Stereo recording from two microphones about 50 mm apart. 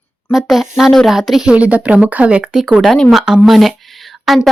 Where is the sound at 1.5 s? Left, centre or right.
Right.